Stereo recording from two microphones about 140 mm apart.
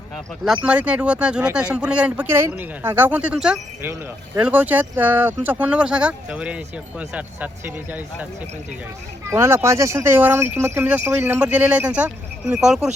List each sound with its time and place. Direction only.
0.4 s speech: 5° right (ahead or behind)
9.3 s speech: 20° right (ahead or behind)